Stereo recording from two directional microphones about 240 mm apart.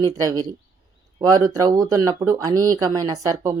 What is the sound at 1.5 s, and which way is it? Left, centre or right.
Speech, centre.